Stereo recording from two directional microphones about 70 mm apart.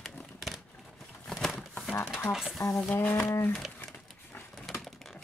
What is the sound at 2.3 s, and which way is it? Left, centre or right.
Speech, centre.